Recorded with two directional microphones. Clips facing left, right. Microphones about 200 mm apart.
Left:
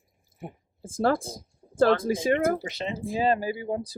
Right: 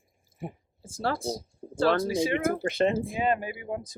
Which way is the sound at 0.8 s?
50° left (ahead or behind).